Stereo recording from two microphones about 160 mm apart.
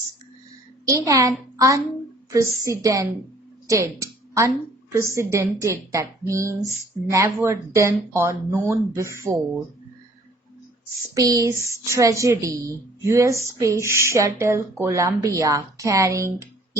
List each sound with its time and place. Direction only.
0.9 s a woman's voice: 20° right (ahead or behind)
11.1 s a woman's voice: 20° right (ahead or behind)